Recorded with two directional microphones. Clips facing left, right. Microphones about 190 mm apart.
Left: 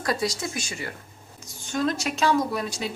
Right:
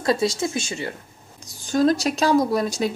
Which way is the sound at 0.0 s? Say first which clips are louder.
Right 6 dB; 25° right (ahead or behind).